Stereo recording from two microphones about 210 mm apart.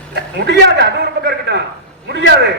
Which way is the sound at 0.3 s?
55° right (ahead or behind).